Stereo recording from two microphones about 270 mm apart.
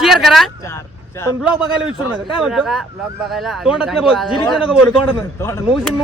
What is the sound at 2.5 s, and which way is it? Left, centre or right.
Speech, centre.